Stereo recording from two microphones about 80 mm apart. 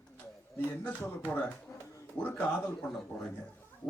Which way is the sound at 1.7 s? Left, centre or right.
Left.